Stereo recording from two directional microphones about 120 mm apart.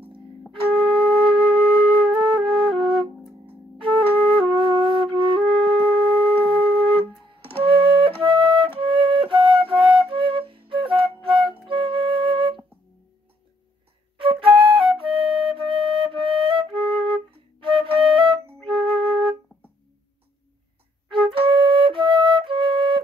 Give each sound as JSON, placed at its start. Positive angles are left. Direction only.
{"t": 0.8, "sound": "flute", "side_deg": -45}
{"t": 3.4, "sound": "music", "side_deg": -45}
{"t": 4.2, "sound": "flute", "side_deg": -45}
{"t": 7.6, "sound": "flute", "side_deg": -45}
{"t": 14.4, "sound": "flute", "side_deg": -50}
{"t": 21.1, "sound": "flute", "side_deg": -45}